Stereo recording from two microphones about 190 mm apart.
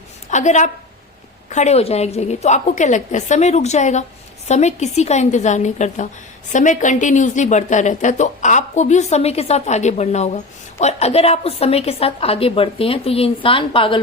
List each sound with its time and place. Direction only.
0.3 s a woman's voice: 40° left (ahead or behind)